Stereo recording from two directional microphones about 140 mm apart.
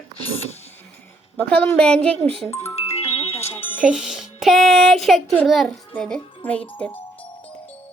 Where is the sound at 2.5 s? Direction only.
20° left (ahead or behind).